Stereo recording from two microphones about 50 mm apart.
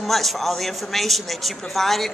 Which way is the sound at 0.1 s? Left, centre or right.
Centre.